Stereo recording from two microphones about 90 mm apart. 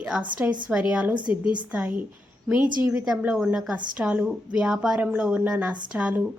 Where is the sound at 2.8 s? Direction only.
10° right (ahead or behind).